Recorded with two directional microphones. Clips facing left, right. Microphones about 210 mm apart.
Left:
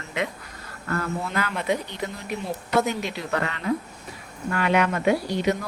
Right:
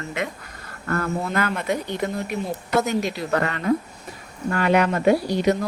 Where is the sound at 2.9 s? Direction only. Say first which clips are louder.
Right 4 dB; 40° right (ahead or behind).